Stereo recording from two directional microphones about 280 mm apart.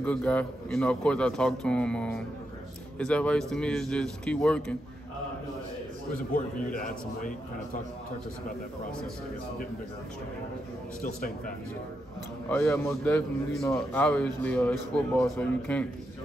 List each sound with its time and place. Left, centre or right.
0.0 s a man's voice: centre
12.4 s a man's voice: centre